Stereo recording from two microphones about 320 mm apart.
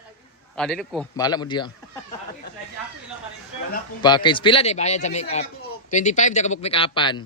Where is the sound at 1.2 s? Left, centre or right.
Centre.